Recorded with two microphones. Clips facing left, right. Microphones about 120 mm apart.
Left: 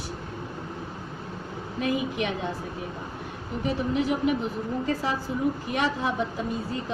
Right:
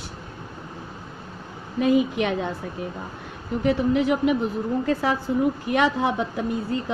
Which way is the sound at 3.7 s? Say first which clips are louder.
Right 5 dB; 65° right (ahead or behind).